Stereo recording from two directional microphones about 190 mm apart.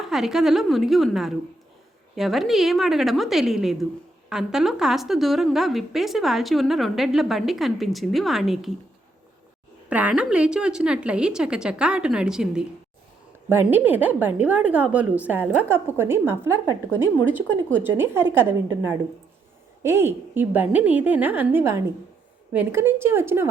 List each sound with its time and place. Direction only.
0.1 s a woman's voice: centre (ahead or behind)
9.9 s a woman's voice: 5° right (ahead or behind)